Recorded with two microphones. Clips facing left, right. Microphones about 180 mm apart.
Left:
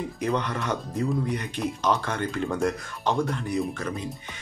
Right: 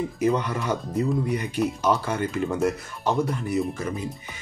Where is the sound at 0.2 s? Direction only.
10° right (ahead or behind).